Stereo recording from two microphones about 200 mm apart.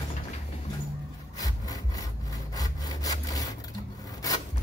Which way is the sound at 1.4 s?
20° left (ahead or behind).